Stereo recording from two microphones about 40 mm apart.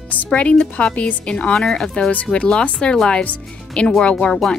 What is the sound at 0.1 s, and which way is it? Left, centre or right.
Speech, left.